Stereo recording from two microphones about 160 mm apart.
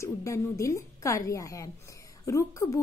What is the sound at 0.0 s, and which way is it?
Speech, 20° left (ahead or behind).